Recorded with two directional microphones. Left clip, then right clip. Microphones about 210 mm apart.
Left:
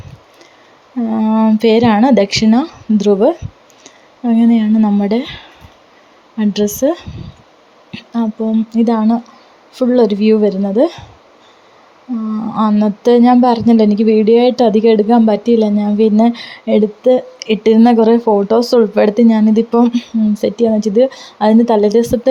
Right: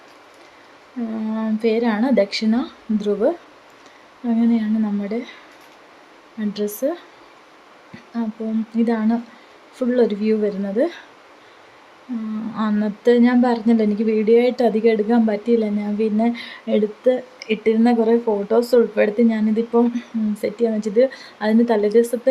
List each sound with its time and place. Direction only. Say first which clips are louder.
1.1 s a woman's voice: left 12 dB; 30° left (ahead or behind)
6.4 s a woman's voice: left 9 dB; 35° left (ahead or behind)
8.7 s speech: left 5 dB; 25° left (ahead or behind)
12.5 s speech: left 9 dB; 25° left (ahead or behind)